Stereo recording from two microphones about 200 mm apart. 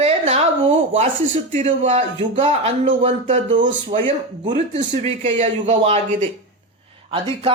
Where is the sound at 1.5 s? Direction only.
35° right (ahead or behind).